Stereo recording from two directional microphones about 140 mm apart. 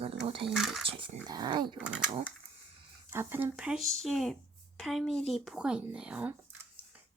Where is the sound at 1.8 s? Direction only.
5° right (ahead or behind).